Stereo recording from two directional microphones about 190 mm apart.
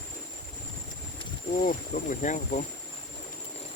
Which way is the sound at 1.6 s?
40° left (ahead or behind).